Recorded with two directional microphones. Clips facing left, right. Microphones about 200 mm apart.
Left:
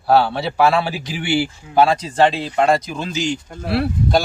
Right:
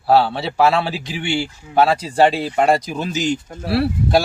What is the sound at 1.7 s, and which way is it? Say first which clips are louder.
Speech: even; 5° right (ahead or behind).